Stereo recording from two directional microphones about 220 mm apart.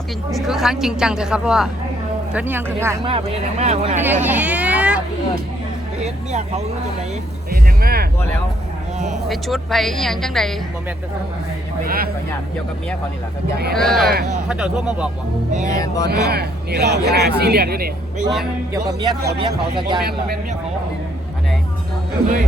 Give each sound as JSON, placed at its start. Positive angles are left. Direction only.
{"t": 0.3, "sound": "a woman's voice", "side_deg": 0}
{"t": 3.0, "sound": "speech", "side_deg": -25}
{"t": 4.0, "sound": "vehicle", "side_deg": -10}
{"t": 6.0, "sound": "speech", "side_deg": -30}
{"t": 7.5, "sound": "speech", "side_deg": -45}
{"t": 9.3, "sound": "a woman's voice", "side_deg": 0}
{"t": 11.9, "sound": "speech", "side_deg": -40}
{"t": 13.7, "sound": "a woman's voice", "side_deg": 0}
{"t": 15.7, "sound": "speech", "side_deg": 15}
{"t": 16.0, "sound": "speech", "side_deg": -45}
{"t": 18.7, "sound": "speech", "side_deg": -15}
{"t": 20.1, "sound": "speech", "side_deg": -45}